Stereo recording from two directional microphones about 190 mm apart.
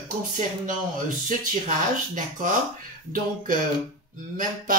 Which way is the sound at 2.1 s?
45° right (ahead or behind).